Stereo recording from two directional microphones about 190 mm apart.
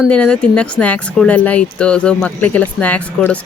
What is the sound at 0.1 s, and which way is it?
A woman's voice, 5° left (ahead or behind).